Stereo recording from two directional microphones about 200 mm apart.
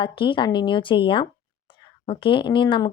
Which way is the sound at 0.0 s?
25° left (ahead or behind).